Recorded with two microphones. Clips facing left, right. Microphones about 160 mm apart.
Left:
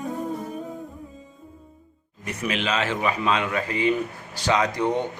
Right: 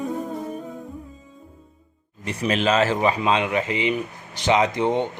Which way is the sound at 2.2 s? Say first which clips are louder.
Right 5 dB; 35° right (ahead or behind).